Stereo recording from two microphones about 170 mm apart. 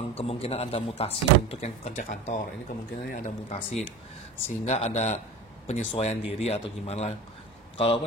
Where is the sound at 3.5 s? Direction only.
40° left (ahead or behind).